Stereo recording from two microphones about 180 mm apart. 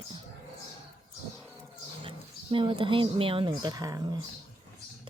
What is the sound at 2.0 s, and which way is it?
Speech, 30° right (ahead or behind).